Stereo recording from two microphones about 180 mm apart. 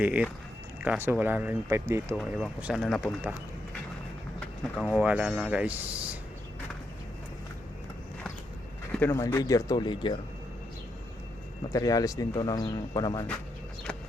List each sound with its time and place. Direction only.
0.0 s speech: 5° right (ahead or behind)
4.4 s speech: 5° left (ahead or behind)
8.9 s speech: 15° left (ahead or behind)
11.7 s speech: 20° left (ahead or behind)